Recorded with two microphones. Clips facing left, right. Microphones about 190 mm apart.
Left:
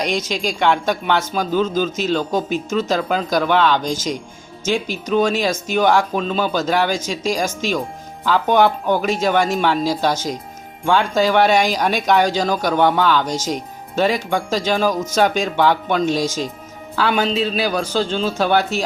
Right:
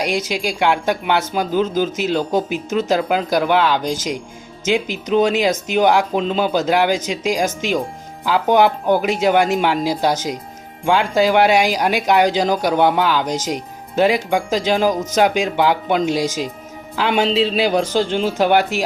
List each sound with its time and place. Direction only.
0.0 s speech: 10° right (ahead or behind)